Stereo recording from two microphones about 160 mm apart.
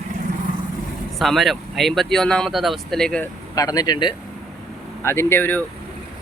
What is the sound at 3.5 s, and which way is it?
Speech, 20° left (ahead or behind).